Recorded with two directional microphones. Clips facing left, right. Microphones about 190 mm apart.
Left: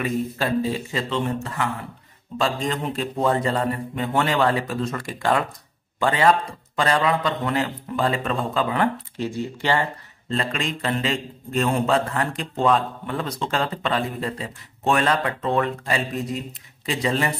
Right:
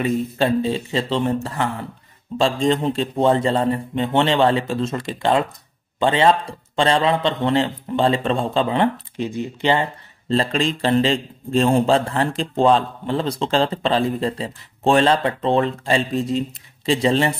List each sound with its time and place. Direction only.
0.0 s a man's voice: 25° right (ahead or behind)